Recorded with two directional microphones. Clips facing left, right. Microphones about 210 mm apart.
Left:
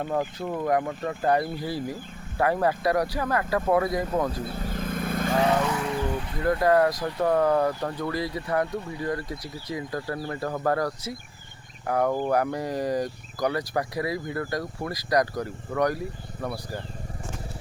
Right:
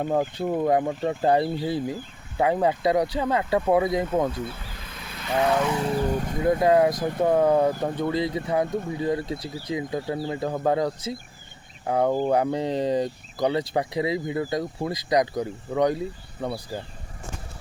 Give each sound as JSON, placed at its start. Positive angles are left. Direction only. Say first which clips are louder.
{"t": 0.1, "sound": "speech", "louder": "right 4 dB", "side_deg": -30}
{"t": 4.3, "sound": "vehicle", "louder": "left 1 dB", "side_deg": 35}
{"t": 5.8, "sound": "vehicle", "louder": "right 3 dB", "side_deg": -35}
{"t": 6.4, "sound": "speech", "louder": "right 2 dB", "side_deg": -20}
{"t": 8.6, "sound": "speech", "louder": "right 4 dB", "side_deg": -50}
{"t": 9.0, "sound": "speech", "louder": "right 4 dB", "side_deg": -20}